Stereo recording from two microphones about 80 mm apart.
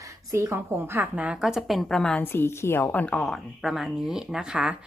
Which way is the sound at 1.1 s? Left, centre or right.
Centre.